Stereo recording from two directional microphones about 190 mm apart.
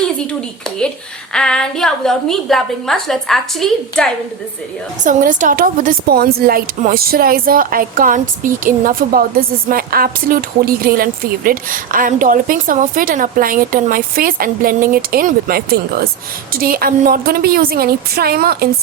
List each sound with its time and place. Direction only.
1.3 s a woman's voice: 5° left (ahead or behind)
5.0 s speech: 45° right (ahead or behind)